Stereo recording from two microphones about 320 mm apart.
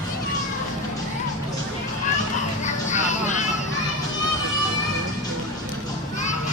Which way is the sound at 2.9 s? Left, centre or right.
Left.